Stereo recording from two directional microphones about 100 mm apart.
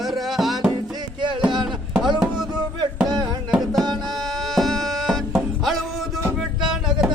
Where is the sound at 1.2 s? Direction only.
55° right (ahead or behind).